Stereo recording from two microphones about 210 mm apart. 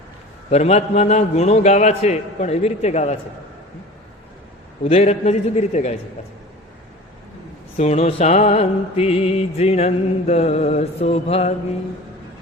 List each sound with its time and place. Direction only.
0.5 s a man's voice: 30° left (ahead or behind)
4.8 s a man's voice: 30° left (ahead or behind)
7.8 s mantra: 30° left (ahead or behind)